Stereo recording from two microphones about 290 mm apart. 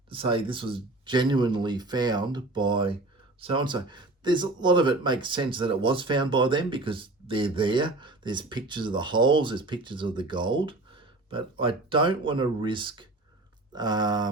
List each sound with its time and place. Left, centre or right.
0.1 s speech: centre